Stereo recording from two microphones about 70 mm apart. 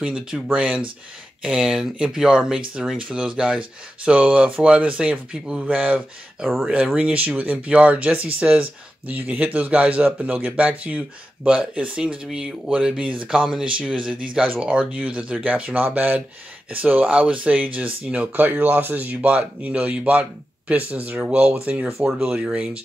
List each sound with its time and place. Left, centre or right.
0.0 s speech: centre
6.4 s speech: centre
7.0 s speech: centre